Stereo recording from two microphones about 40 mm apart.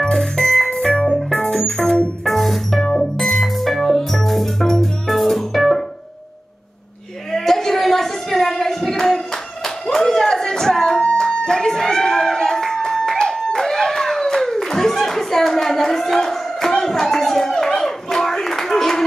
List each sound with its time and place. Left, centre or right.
0.0 s music: centre
0.7 s music: left
1.3 s organ: centre
2.2 s music: centre
2.8 s music: centre
3.2 s music: centre
7.3 s a sound: centre
13.2 s clapping: centre